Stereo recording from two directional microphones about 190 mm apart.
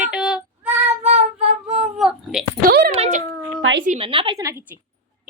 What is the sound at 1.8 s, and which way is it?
Speech, 5° right (ahead or behind).